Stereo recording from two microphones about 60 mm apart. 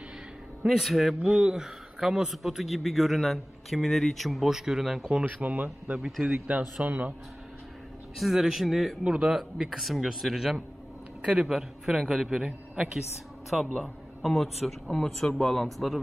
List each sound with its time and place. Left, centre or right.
0.7 s a man's voice: centre
1.2 s a man's voice: centre
5.2 s speech: right
5.9 s a man's voice: centre
6.2 s speech: right
8.2 s a man's voice: centre
9.1 s a man's voice: centre
9.8 s a man's voice: centre